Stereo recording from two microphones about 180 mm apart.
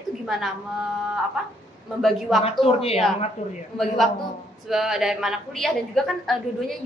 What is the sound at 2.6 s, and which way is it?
Speech, 35° left (ahead or behind).